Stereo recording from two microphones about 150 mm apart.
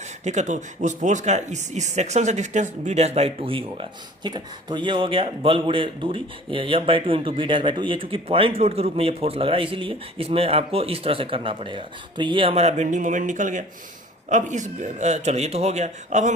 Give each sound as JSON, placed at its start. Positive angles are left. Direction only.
{"t": 0.3, "sound": "a man's voice", "side_deg": -50}